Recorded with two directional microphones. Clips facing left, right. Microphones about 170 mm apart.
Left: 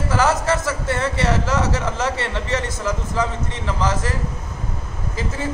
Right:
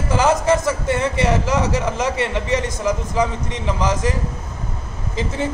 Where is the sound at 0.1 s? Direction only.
15° right (ahead or behind).